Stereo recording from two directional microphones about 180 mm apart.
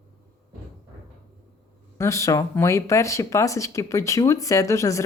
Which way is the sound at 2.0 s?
15° left (ahead or behind).